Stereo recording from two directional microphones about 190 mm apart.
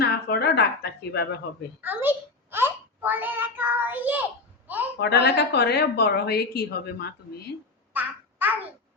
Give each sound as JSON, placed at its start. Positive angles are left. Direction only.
{"t": 0.0, "sound": "a woman's voice", "side_deg": 55}
{"t": 1.8, "sound": "a sound", "side_deg": -10}
{"t": 4.9, "sound": "a woman's voice", "side_deg": 60}
{"t": 7.9, "sound": "babbling", "side_deg": -10}